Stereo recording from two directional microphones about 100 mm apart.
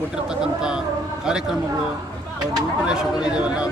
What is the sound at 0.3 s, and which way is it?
A man's voice, 5° right (ahead or behind).